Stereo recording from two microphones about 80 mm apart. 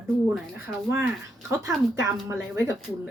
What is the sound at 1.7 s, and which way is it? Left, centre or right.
Speech, right.